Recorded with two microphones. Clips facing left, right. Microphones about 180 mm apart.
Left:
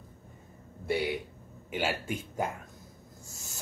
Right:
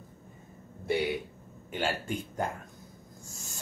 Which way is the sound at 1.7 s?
5° left (ahead or behind).